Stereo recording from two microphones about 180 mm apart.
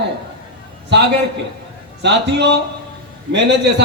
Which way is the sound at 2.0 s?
70° right (ahead or behind).